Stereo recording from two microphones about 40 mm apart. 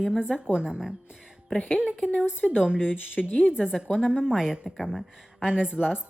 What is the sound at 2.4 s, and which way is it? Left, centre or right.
Speech, centre.